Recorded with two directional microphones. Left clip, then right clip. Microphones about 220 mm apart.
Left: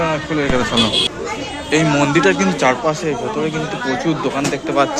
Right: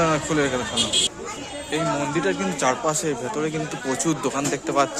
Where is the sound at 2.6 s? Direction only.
20° right (ahead or behind).